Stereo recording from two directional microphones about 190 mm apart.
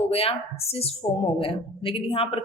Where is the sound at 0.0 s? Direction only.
30° left (ahead or behind).